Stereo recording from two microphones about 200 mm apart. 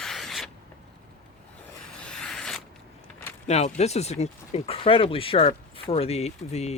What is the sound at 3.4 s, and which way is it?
Speech, 35° left (ahead or behind).